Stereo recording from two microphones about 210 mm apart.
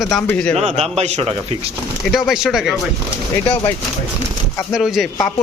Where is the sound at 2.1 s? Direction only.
Centre (ahead or behind).